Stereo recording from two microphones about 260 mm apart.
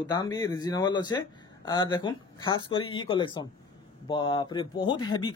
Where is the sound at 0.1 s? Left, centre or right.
Centre.